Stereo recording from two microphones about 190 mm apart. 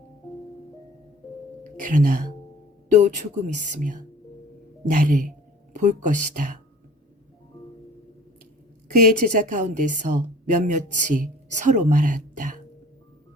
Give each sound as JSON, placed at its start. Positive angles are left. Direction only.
{"t": 1.8, "sound": "a woman's voice", "side_deg": -45}
{"t": 4.9, "sound": "a woman's voice", "side_deg": -45}
{"t": 8.9, "sound": "a woman's voice", "side_deg": -55}
{"t": 9.3, "sound": "a woman's voice", "side_deg": -45}